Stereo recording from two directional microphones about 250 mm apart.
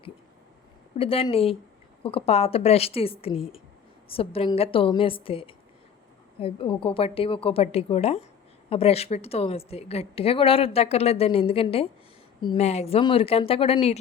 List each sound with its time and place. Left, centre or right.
0.9 s a woman's voice: left